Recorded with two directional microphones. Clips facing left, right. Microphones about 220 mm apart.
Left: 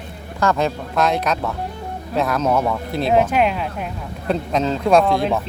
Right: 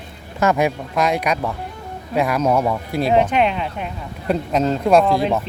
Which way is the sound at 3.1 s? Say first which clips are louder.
Even; 5° left (ahead or behind).